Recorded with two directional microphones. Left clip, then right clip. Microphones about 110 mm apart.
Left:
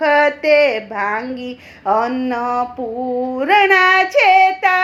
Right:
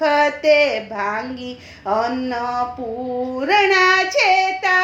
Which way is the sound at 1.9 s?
45° left (ahead or behind).